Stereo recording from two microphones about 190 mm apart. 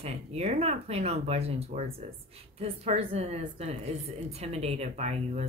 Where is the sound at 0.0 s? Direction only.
35° right (ahead or behind).